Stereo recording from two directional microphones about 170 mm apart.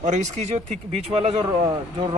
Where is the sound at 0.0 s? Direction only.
45° right (ahead or behind).